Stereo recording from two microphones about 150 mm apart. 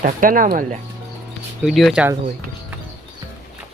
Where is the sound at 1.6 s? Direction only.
Centre (ahead or behind).